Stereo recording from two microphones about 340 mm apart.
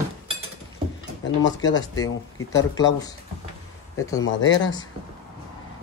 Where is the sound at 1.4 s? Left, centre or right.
Centre.